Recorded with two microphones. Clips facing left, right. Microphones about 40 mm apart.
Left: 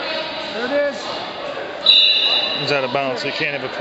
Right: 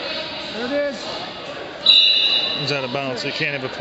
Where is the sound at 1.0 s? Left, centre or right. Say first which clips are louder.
Left 3 dB; centre.